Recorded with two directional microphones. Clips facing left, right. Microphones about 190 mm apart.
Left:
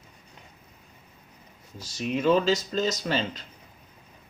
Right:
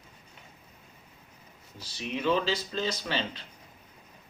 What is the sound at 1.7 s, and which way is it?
Speech, 45° left (ahead or behind).